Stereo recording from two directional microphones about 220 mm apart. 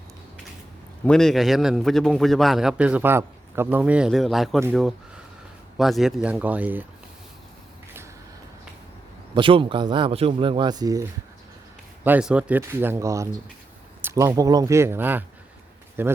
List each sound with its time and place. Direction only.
1.0 s a man's voice: centre (ahead or behind)
9.3 s speech: 25° right (ahead or behind)
12.0 s speech: 5° right (ahead or behind)